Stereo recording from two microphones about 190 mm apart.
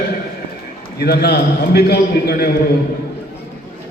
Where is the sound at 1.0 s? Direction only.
55° left (ahead or behind).